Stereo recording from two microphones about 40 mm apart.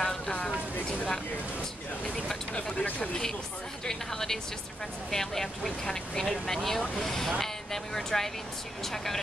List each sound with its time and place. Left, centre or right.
0.0 s vehicle: centre
2.5 s speech: left
3.8 s speech: centre